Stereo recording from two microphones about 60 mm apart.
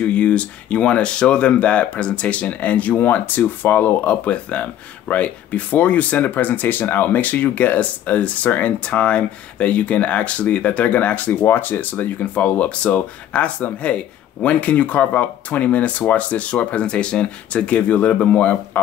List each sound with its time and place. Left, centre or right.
0.0 s speech: left